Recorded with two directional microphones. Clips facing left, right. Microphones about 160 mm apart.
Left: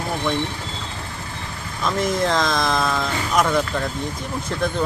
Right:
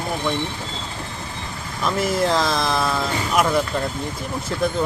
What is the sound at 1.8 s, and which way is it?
Speech, 5° right (ahead or behind).